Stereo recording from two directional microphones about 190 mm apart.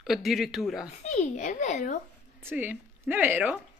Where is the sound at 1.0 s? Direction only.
40° left (ahead or behind).